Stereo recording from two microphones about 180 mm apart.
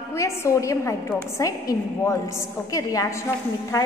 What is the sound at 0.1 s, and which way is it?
A woman's voice, 15° left (ahead or behind).